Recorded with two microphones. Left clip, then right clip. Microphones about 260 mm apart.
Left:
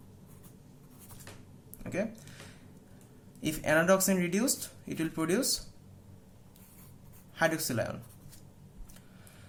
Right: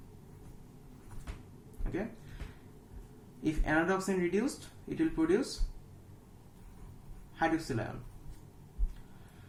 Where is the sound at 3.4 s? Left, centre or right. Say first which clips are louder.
Left 3 dB; left.